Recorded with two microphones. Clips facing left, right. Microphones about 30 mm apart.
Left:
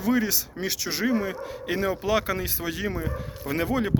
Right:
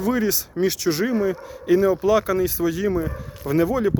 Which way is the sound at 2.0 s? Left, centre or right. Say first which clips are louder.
Right 6 dB; left.